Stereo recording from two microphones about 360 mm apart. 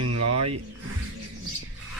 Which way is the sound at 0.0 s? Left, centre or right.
Right.